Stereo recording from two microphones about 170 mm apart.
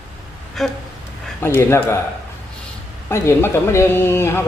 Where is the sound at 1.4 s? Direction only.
15° left (ahead or behind).